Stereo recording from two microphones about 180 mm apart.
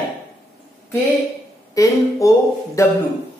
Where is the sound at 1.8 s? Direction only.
20° left (ahead or behind).